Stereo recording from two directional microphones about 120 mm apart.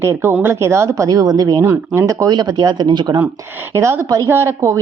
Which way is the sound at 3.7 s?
20° right (ahead or behind).